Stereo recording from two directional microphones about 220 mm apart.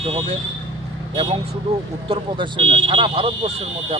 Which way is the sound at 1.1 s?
20° right (ahead or behind).